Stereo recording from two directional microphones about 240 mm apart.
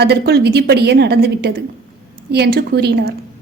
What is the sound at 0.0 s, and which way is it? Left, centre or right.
A woman's voice, right.